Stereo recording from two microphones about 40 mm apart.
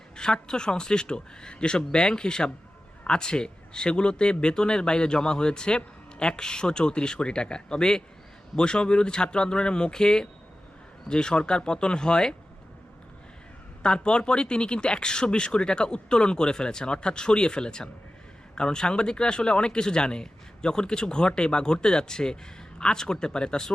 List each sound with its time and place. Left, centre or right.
0.2 s speech: centre
13.8 s speech: left